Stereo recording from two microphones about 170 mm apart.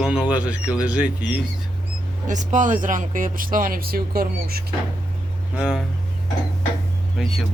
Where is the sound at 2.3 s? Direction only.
45° right (ahead or behind); by 4.6 s 60° right (ahead or behind).